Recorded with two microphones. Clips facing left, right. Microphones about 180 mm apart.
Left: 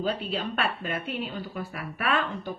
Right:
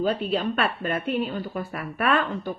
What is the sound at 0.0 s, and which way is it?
Speech, 50° right (ahead or behind).